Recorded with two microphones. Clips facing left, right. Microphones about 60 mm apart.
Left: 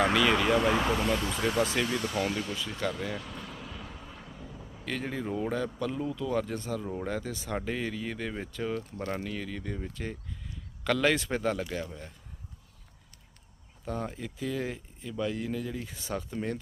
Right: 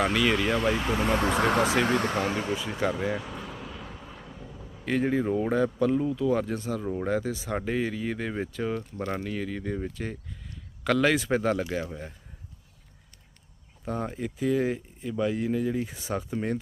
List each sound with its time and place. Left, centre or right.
0.0 s speech: centre
1.2 s speech: right
1.8 s speech: right
2.2 s speech: right
3.2 s a sound: centre
4.9 s speech: centre
13.8 s speech: centre